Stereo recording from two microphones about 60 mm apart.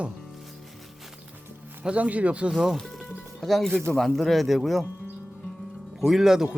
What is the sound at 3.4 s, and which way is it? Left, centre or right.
Speech, centre.